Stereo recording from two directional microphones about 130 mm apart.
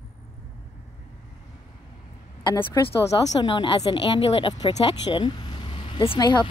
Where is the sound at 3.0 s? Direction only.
30° left (ahead or behind).